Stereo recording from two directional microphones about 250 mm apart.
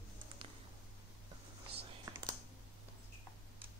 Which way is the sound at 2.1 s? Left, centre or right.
Centre.